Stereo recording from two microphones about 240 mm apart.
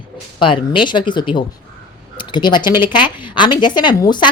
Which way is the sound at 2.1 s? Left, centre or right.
Centre.